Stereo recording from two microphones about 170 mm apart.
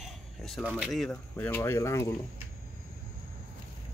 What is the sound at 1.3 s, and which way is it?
Speech, 15° left (ahead or behind).